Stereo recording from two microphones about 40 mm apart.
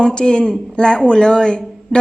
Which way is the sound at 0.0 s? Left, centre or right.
Left.